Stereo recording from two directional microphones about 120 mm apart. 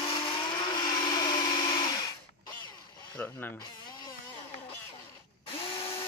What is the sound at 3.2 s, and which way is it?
Music, 15° left (ahead or behind).